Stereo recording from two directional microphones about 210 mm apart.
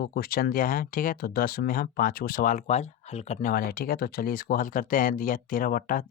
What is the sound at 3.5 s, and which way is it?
Speech, 45° left (ahead or behind).